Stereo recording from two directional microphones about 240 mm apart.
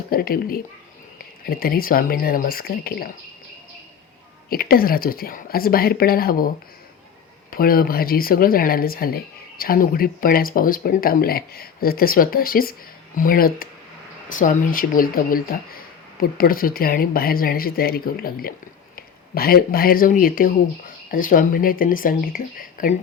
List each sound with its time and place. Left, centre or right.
0.1 s speech: left
4.4 s speech: left
7.5 s speech: left